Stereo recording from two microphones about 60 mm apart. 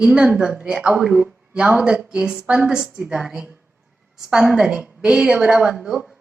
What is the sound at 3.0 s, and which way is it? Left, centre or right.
Speech, right.